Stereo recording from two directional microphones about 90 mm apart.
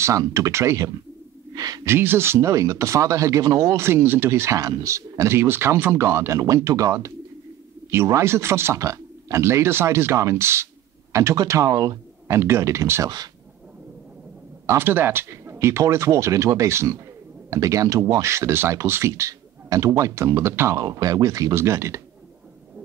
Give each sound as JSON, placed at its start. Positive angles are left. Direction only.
{"t": 0.2, "sound": "speech", "side_deg": -35}
{"t": 1.5, "sound": "speech", "side_deg": -45}
{"t": 1.9, "sound": "speech", "side_deg": -25}
{"t": 12.3, "sound": "speech", "side_deg": -30}
{"t": 14.7, "sound": "speech", "side_deg": -25}
{"t": 20.8, "sound": "speech", "side_deg": -40}